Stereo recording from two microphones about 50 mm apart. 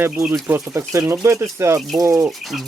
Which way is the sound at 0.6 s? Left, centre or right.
Right.